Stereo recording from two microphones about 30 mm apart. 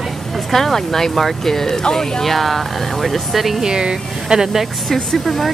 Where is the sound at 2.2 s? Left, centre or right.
Centre.